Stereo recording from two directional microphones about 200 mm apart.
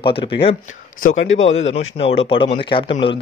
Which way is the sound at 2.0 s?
30° left (ahead or behind).